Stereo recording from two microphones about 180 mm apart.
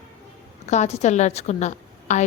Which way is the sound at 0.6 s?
40° left (ahead or behind).